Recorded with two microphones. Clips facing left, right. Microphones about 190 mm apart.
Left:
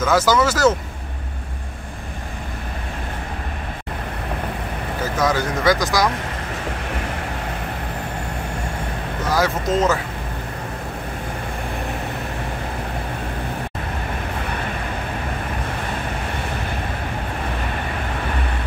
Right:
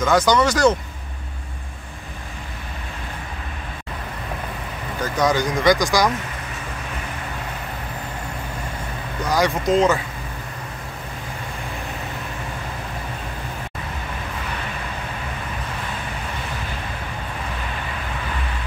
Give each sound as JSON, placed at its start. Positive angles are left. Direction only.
{"t": 0.0, "sound": "speech", "side_deg": 5}
{"t": 5.0, "sound": "speech", "side_deg": 5}
{"t": 9.3, "sound": "speech", "side_deg": 5}